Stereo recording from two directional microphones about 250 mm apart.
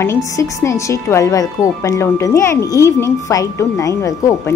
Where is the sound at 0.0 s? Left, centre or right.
Centre.